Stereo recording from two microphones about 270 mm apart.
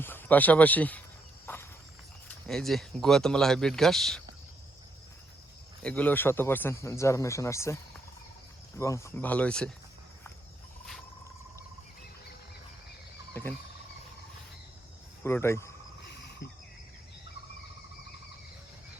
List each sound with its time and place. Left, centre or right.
0.0 s speech: centre
2.5 s speech: centre
5.8 s speech: centre
13.3 s a sound: centre
15.2 s speech: centre
16.0 s a sound: left